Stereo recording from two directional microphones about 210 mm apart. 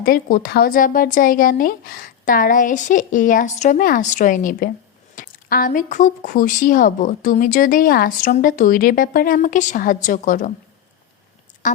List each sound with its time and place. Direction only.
0.0 s speech: 45° left (ahead or behind)
11.6 s speech: 35° left (ahead or behind)